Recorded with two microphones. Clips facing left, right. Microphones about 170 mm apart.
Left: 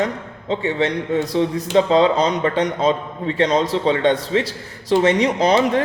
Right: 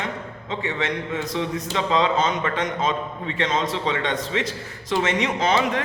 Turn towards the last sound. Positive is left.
turn(degrees=35)  # may be behind; listen again after turning